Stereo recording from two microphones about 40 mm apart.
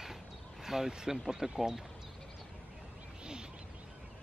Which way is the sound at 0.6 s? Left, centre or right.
Centre.